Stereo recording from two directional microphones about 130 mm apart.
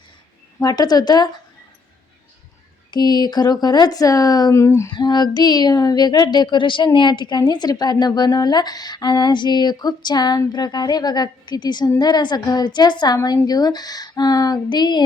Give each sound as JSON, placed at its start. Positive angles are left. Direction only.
{"t": 0.6, "sound": "speech", "side_deg": 30}
{"t": 2.9, "sound": "speech", "side_deg": 35}
{"t": 4.9, "sound": "speech", "side_deg": 35}